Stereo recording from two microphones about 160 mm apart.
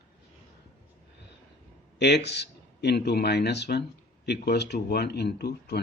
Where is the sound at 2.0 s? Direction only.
90° left.